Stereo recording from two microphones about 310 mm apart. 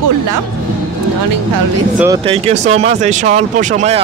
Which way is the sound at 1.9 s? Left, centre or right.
Centre.